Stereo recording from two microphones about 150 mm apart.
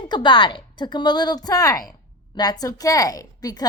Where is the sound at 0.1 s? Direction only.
30° left (ahead or behind).